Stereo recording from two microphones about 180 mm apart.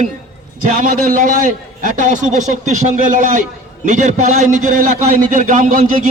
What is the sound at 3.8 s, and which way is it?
A man's voice, 45° right (ahead or behind).